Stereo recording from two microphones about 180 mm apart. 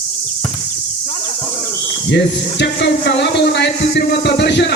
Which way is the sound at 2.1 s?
70° left (ahead or behind).